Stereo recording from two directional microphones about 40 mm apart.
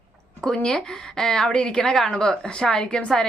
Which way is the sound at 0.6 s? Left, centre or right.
Centre.